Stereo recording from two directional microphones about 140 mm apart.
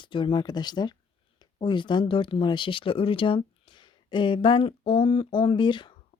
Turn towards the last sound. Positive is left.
turn(degrees=35)  # may be behind; listen again after turning